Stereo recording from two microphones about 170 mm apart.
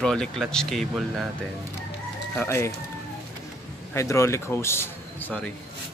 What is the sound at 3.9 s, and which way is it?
Speech, 15° left (ahead or behind).